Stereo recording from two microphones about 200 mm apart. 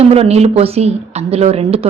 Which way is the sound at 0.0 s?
30° right (ahead or behind).